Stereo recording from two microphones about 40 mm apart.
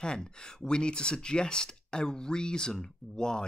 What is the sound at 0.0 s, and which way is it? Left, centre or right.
Speech, centre.